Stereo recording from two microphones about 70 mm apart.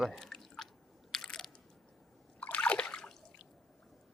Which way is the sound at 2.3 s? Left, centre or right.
Centre.